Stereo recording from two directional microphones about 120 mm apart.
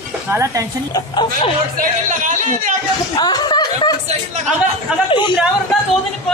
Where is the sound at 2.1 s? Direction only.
90° right.